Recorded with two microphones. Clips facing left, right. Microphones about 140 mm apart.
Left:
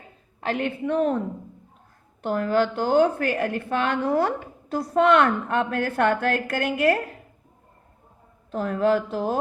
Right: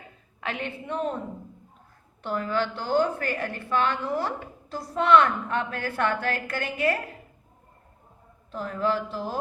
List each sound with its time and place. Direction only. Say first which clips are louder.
0.4 s a woman's voice: left 7 dB; 45° left (ahead or behind)
2.2 s a woman's voice: left 5 dB; 50° left (ahead or behind)
8.5 s speech: left 6 dB; 55° left (ahead or behind)